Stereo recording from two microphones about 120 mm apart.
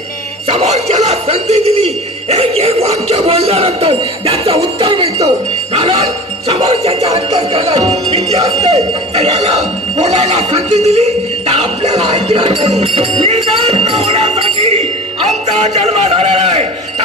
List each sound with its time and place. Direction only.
0.5 s speech: 60° right (ahead or behind)
6.5 s speech: 55° right (ahead or behind)
8.7 s speech: 60° right (ahead or behind)